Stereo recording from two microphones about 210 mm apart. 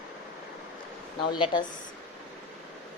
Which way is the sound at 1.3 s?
25° left (ahead or behind).